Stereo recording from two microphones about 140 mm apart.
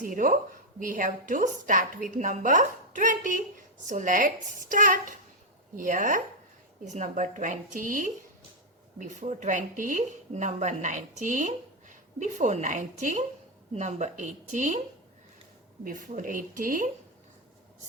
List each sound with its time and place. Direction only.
0.0 s speech: 70° right (ahead or behind)
9.0 s speech: 60° right (ahead or behind)
15.8 s speech: 70° right (ahead or behind)